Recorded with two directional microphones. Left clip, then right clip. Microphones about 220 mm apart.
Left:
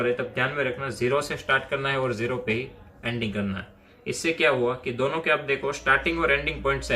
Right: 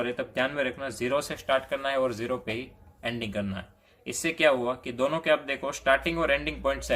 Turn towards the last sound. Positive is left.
turn(degrees=-50)  # may be behind; listen again after turning